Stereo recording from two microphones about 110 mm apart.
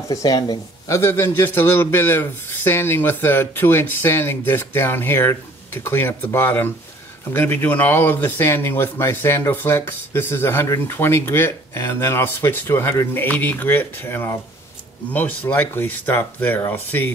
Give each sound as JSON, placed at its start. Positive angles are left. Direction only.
{"t": 0.1, "sound": "a man's voice", "side_deg": 35}